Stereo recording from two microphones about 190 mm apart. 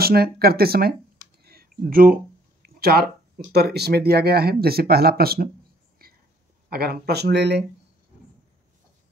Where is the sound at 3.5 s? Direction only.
60° right (ahead or behind).